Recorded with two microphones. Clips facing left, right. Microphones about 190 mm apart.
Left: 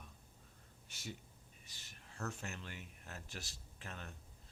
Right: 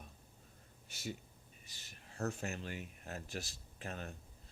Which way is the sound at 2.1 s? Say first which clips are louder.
Right 6 dB; 40° right (ahead or behind).